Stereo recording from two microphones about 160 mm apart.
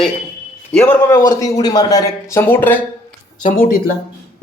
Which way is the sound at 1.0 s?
20° left (ahead or behind).